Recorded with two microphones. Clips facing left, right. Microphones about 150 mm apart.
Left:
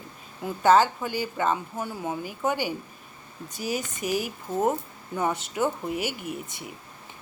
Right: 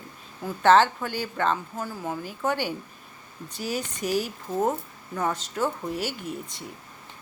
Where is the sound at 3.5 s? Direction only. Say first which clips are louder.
Even; 45° left (ahead or behind).